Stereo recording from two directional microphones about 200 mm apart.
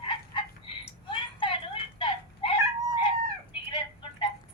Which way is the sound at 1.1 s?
25° left (ahead or behind).